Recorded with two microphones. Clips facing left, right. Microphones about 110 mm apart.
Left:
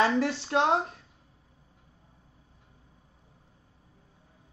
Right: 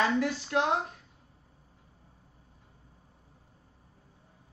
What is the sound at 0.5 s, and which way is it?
Speech, 35° left (ahead or behind).